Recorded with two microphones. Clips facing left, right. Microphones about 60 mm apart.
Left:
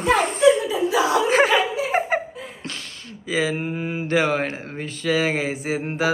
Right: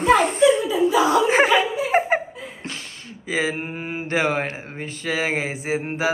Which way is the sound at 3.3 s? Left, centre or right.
Right.